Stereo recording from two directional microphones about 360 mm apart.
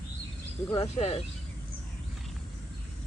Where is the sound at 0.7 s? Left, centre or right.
Centre.